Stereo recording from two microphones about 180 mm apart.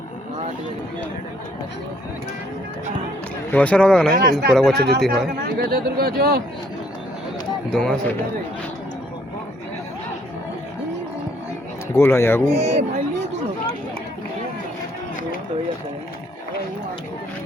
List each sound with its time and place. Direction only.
3.5 s speech: 5° left (ahead or behind)
4.1 s speech: 55° right (ahead or behind)
4.5 s speech: centre (ahead or behind)
4.8 s speech: 65° right (ahead or behind)
7.7 s speech: 5° left (ahead or behind)
11.9 s speech: 15° left (ahead or behind)
12.5 s speech: 35° right (ahead or behind)